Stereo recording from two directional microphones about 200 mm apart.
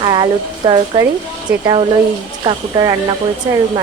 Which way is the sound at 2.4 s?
20° right (ahead or behind).